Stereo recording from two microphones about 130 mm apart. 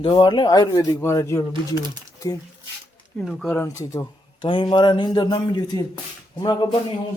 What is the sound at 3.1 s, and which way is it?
Speech, 5° left (ahead or behind).